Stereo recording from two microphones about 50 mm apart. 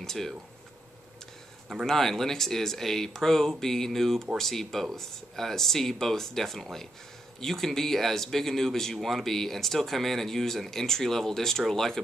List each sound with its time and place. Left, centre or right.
0.0 s speech: centre
1.9 s speech: centre